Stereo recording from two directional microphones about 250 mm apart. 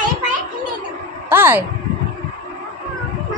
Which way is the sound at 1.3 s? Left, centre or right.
Centre.